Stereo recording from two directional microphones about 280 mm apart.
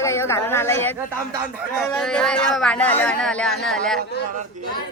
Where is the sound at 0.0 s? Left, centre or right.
Centre.